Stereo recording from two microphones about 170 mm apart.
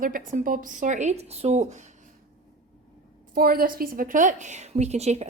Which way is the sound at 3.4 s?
60° right (ahead or behind).